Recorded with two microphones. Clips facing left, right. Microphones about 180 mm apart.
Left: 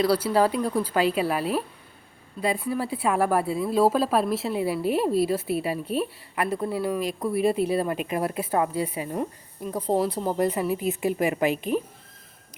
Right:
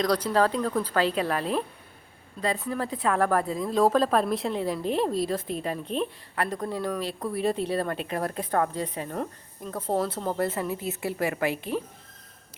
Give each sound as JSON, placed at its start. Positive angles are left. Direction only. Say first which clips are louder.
{"t": 0.0, "sound": "speech", "louder": "left 2 dB", "side_deg": 5}